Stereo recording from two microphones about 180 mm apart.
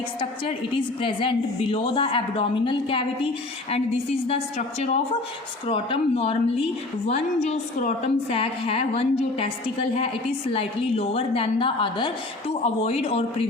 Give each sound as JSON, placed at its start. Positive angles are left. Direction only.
{"t": 0.2, "sound": "a woman's voice", "side_deg": 30}